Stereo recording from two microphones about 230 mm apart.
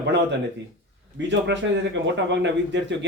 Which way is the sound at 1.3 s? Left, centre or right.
Right.